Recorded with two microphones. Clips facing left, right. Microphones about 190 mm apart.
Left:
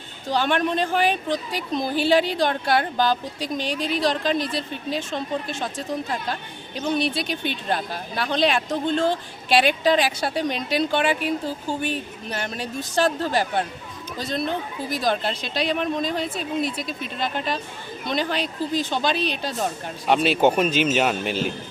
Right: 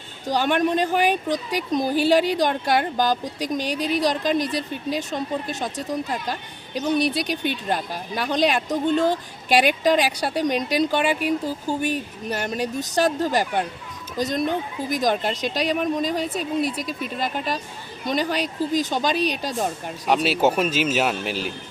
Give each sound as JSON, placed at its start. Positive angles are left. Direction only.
{"t": 0.3, "sound": "speech", "side_deg": -10}
{"t": 3.6, "sound": "speech", "side_deg": -40}
{"t": 3.9, "sound": "speech", "side_deg": -10}
{"t": 6.7, "sound": "speech", "side_deg": -10}
{"t": 7.1, "sound": "speech", "side_deg": -40}
{"t": 7.7, "sound": "a man's voice", "side_deg": -10}